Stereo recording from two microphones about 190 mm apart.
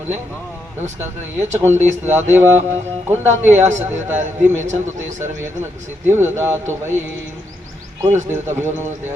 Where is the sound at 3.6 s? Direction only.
40° right (ahead or behind).